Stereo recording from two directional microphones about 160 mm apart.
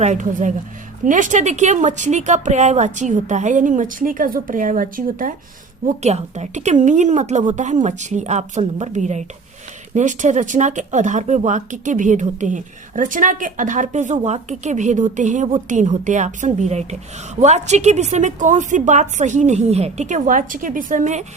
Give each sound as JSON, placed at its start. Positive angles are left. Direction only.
{"t": 0.0, "sound": "speech", "side_deg": -50}
{"t": 5.8, "sound": "speech", "side_deg": -45}